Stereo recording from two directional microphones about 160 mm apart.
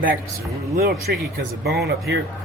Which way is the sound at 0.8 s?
75° right (ahead or behind).